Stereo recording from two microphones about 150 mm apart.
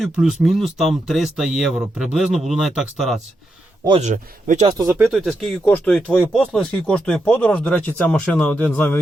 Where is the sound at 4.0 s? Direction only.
55° right (ahead or behind).